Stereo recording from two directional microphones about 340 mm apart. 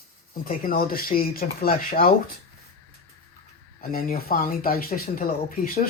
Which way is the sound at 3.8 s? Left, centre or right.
Left.